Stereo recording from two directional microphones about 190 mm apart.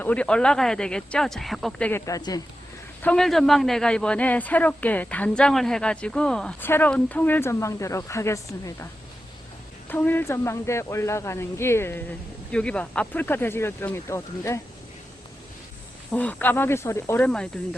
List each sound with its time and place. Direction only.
0.0 s speech: 5° left (ahead or behind)
1.9 s a man's voice: 15° left (ahead or behind)
3.0 s a man's voice: 5° left (ahead or behind)
9.9 s a man's voice: 10° left (ahead or behind)
16.1 s a man's voice: 10° left (ahead or behind)